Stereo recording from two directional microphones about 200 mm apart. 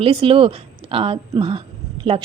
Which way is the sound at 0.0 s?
25° right (ahead or behind).